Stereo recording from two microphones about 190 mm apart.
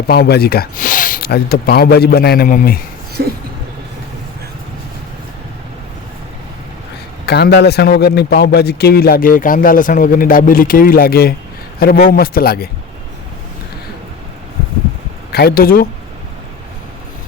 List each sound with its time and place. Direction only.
0.1 s a man's voice: 55° left (ahead or behind)
7.3 s a man's voice: 60° left (ahead or behind)
15.3 s a man's voice: 55° left (ahead or behind)